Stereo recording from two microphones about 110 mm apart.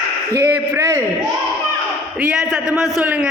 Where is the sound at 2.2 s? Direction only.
5° right (ahead or behind).